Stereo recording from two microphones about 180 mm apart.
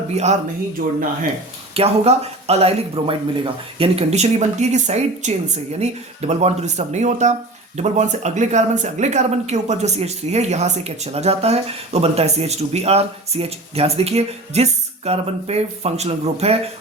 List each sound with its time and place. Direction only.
0.1 s speech: 40° right (ahead or behind)
1.7 s speech: 35° right (ahead or behind)